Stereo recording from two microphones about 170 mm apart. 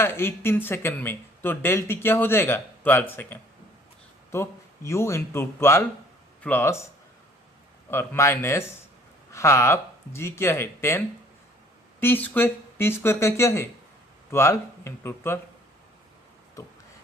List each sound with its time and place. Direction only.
0.0 s speech: 15° left (ahead or behind)
7.9 s speech: 15° left (ahead or behind)